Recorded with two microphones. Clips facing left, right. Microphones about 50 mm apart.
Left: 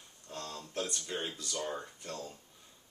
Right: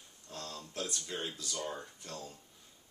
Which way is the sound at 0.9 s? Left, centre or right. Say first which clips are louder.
Left 2 dB; centre.